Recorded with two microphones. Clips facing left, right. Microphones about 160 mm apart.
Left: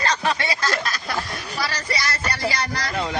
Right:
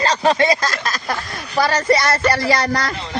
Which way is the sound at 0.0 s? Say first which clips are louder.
Right 7 dB; 35° right (ahead or behind).